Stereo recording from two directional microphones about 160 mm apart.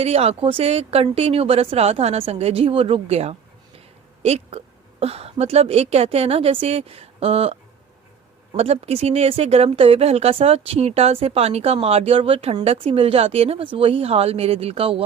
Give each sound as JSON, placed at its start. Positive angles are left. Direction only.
{"t": 0.0, "sound": "a woman's voice", "side_deg": -40}